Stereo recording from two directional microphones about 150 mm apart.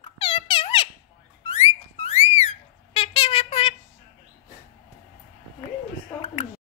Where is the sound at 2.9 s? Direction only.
40° left (ahead or behind).